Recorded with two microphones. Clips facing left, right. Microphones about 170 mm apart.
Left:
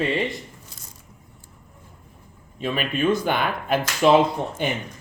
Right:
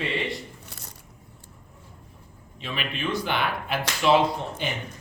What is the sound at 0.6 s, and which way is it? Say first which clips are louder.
Biting: right 2 dB; 65° right (ahead or behind).